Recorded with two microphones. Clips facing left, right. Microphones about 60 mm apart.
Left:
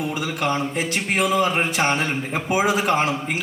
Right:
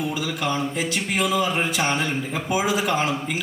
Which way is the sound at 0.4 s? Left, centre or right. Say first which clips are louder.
Left 2 dB; left.